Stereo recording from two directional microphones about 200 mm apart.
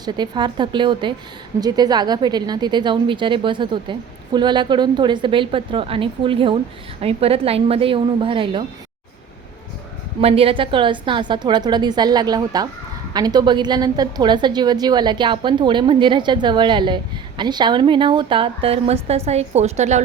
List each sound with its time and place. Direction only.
0.0 s a woman's voice: 20° right (ahead or behind)
10.2 s a woman's voice: 30° right (ahead or behind)